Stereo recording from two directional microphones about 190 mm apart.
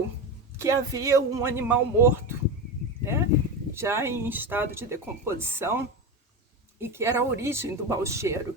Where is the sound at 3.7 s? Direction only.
15° right (ahead or behind).